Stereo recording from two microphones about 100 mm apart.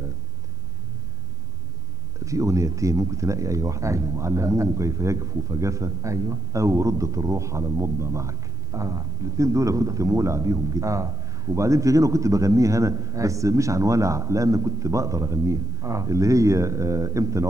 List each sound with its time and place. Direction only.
2.2 s speech: 30° right (ahead or behind)